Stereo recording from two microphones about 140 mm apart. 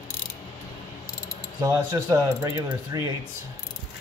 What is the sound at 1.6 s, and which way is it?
Speech, 20° right (ahead or behind).